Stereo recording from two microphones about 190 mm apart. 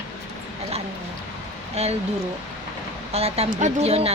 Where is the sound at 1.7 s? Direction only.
35° right (ahead or behind).